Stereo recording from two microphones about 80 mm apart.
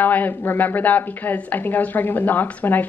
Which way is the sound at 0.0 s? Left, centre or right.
Left.